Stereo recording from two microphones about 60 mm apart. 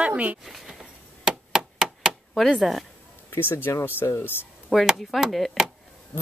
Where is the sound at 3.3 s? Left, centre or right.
Left.